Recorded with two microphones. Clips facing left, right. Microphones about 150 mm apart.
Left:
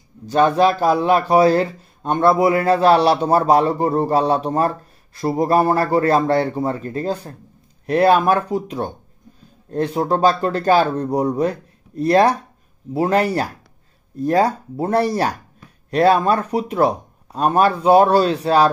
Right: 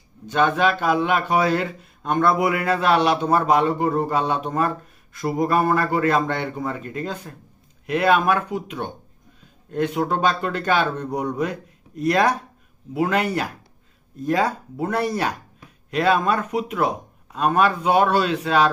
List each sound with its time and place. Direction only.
0.3 s speech: 35° left (ahead or behind)